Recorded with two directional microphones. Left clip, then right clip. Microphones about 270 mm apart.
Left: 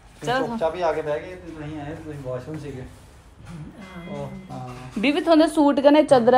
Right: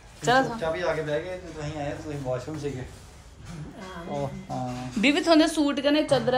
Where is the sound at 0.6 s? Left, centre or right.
Centre.